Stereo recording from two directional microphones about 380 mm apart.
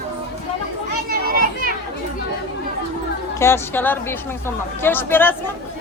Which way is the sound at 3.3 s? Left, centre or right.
Centre.